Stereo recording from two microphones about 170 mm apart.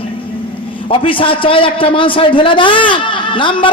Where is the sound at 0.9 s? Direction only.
30° left (ahead or behind).